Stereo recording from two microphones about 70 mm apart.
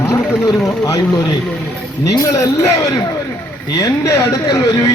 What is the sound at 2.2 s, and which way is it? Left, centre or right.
A man's voice, left.